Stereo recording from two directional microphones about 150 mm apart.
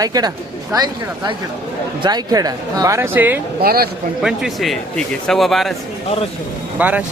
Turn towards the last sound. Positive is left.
turn(degrees=-10)  # may be behind; listen again after turning